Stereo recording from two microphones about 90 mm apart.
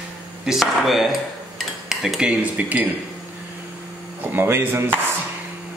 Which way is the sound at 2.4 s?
15° right (ahead or behind).